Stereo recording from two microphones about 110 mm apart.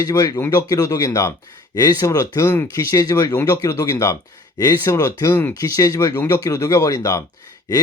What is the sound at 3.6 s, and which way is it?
Speech, 30° left (ahead or behind).